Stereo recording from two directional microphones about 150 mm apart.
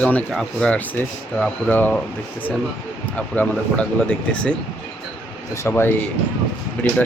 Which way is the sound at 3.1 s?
10° left (ahead or behind).